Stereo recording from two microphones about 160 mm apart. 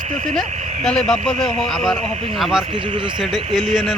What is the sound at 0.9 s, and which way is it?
Speech, centre (ahead or behind).